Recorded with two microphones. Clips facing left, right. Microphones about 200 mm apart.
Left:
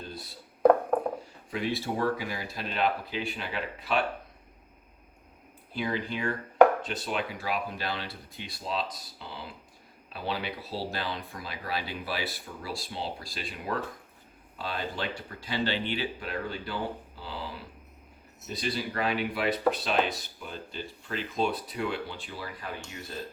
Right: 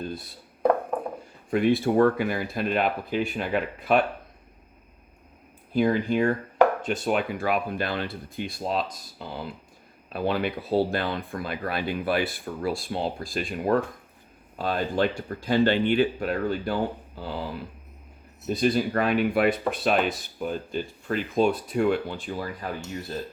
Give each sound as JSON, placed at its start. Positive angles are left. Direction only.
{"t": 1.5, "sound": "speech", "side_deg": -55}
{"t": 5.7, "sound": "speech", "side_deg": -50}
{"t": 18.4, "sound": "speech", "side_deg": -50}